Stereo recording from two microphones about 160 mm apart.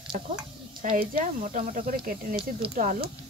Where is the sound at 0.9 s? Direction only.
55° right (ahead or behind).